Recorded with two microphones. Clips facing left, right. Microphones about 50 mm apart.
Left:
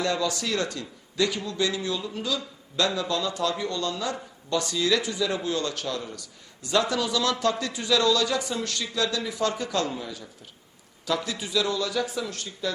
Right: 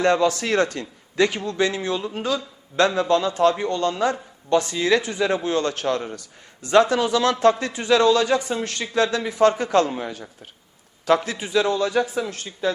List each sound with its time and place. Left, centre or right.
0.0 s a man's voice: right